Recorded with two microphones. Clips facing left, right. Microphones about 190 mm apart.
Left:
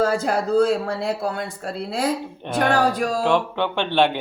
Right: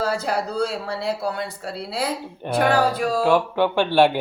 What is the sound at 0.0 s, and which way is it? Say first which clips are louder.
Speech: left 3 dB; 50° left (ahead or behind).